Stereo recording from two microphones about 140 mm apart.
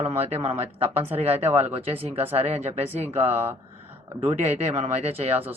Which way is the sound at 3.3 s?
15° right (ahead or behind).